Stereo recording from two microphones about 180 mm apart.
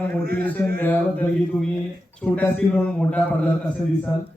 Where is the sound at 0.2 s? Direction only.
55° right (ahead or behind).